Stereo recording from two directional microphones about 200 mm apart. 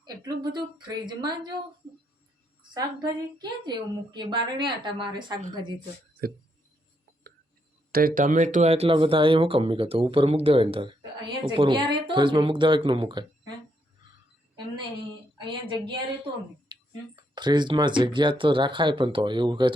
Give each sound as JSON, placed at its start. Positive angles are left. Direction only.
{"t": 0.0, "sound": "speech", "side_deg": -20}
{"t": 2.7, "sound": "speech", "side_deg": -20}
{"t": 7.9, "sound": "speech", "side_deg": -45}
{"t": 15.4, "sound": "speech", "side_deg": -25}
{"t": 16.7, "sound": "a sound", "side_deg": -20}
{"t": 17.3, "sound": "speech", "side_deg": -20}